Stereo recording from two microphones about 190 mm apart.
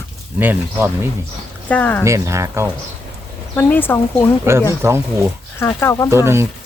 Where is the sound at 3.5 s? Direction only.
10° left (ahead or behind).